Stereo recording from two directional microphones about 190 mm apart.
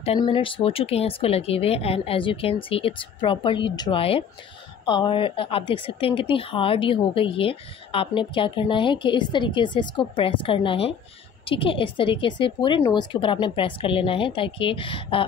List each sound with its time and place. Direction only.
0.0 s a woman's voice: 30° left (ahead or behind)